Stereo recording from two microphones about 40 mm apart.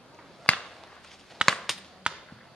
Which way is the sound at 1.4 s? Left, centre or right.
Centre.